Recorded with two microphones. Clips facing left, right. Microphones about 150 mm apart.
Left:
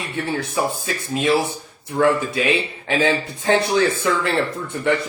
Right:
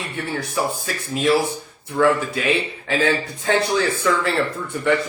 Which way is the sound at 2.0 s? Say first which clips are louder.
Even; 20° left (ahead or behind).